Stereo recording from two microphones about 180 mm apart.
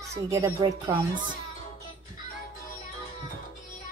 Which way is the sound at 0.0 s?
15° right (ahead or behind).